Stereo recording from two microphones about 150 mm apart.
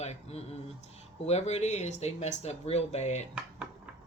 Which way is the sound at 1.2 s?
45° left (ahead or behind).